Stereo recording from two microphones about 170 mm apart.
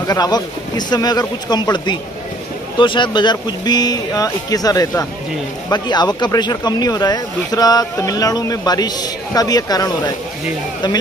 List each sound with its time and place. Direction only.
0.0 s speech: 20° left (ahead or behind)